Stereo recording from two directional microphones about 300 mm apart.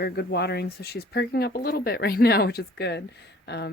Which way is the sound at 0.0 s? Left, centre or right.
Left.